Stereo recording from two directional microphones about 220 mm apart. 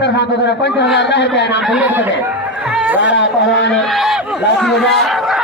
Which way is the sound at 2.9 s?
55° left (ahead or behind).